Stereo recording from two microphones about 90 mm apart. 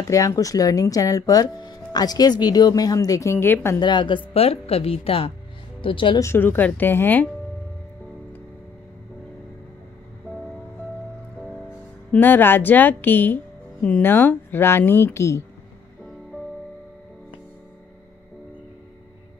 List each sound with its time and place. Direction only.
0.1 s speech: 40° left (ahead or behind)
3.8 s speech: 60° left (ahead or behind)
4.3 s speech: 90° left
5.8 s speech: 75° left (ahead or behind)
6.3 s speech: 20° left (ahead or behind)
12.1 s speech: 20° left (ahead or behind)